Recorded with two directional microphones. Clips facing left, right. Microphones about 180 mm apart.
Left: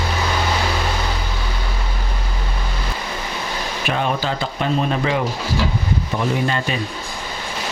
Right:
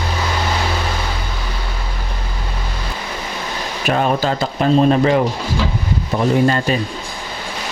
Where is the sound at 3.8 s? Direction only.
45° right (ahead or behind).